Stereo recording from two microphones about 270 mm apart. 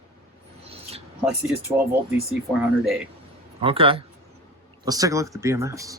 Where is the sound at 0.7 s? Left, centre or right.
Right.